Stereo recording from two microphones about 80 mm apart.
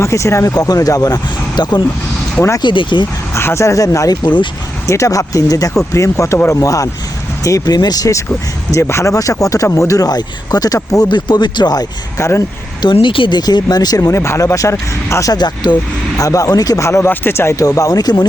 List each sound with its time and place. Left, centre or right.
0.0 s speech: left
2.6 s speech: left
3.3 s speech: left
8.7 s speech: left
9.1 s speech: left
11.1 s speech: left
12.1 s speech: left
12.8 s speech: left
13.4 s speech: left
15.3 s speech: left
16.2 s speech: left
17.7 s speech: left